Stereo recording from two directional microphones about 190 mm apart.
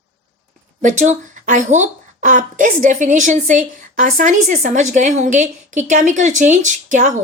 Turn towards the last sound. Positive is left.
turn(degrees=-40)  # may be behind; listen again after turning